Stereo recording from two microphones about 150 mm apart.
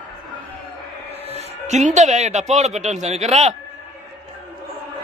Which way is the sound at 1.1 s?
45° right (ahead or behind).